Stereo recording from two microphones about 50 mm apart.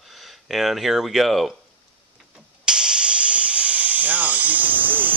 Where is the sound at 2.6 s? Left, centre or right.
Centre; by 5.1 s right.